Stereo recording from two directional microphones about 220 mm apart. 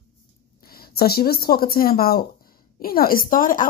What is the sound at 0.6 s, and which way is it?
A woman's voice, 45° left (ahead or behind).